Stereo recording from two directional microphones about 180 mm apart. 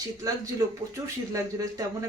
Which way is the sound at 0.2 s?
20° right (ahead or behind).